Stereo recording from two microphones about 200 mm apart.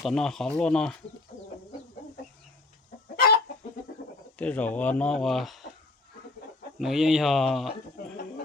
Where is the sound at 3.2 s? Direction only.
50° left (ahead or behind).